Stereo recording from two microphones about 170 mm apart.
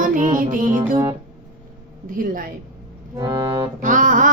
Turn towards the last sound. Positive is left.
turn(degrees=-50)  # may be behind; listen again after turning